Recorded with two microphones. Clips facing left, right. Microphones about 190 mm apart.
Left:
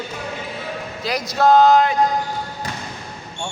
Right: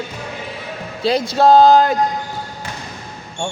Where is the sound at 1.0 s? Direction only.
30° right (ahead or behind).